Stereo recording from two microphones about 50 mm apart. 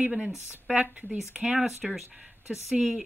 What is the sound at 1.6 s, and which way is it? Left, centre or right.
Speech, centre.